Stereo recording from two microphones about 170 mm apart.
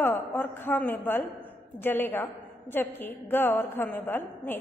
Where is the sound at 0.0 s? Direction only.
10° left (ahead or behind).